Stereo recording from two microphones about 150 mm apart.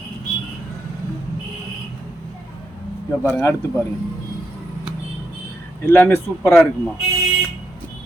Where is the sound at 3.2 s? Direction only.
10° left (ahead or behind).